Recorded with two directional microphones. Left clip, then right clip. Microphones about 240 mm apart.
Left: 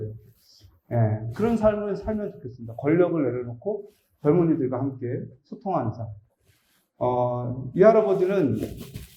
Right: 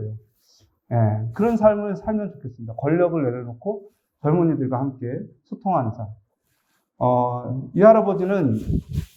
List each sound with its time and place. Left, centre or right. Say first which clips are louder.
0.5 s speech: right 3 dB; right
7.0 s speech: right 4 dB; right